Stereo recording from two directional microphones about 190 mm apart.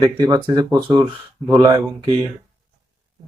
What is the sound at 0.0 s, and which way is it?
Speech, 20° right (ahead or behind).